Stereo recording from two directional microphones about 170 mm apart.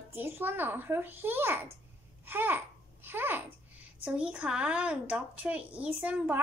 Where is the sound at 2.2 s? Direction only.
10° right (ahead or behind).